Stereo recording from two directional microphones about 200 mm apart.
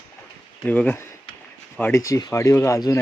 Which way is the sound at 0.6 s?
10° left (ahead or behind).